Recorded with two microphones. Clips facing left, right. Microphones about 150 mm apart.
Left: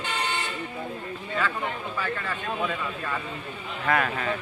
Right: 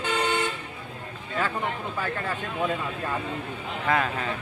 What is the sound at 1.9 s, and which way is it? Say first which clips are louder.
Speech: right 1 dB; 45° right (ahead or behind).